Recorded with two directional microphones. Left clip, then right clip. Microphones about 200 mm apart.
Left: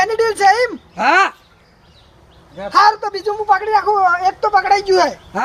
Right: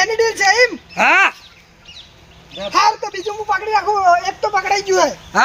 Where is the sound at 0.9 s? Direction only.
25° right (ahead or behind).